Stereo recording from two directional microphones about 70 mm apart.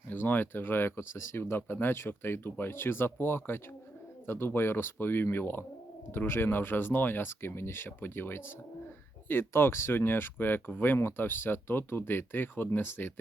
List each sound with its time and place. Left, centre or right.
0.1 s speech: left